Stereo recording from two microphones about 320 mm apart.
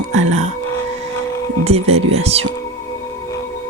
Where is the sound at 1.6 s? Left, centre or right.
Centre.